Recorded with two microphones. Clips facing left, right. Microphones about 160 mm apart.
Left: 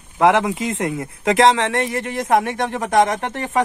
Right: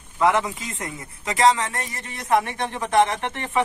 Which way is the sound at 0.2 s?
75° left (ahead or behind).